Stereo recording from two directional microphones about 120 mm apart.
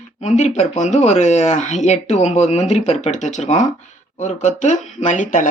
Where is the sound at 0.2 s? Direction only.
70° left (ahead or behind).